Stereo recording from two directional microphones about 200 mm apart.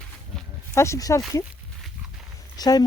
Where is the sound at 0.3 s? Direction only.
10° left (ahead or behind).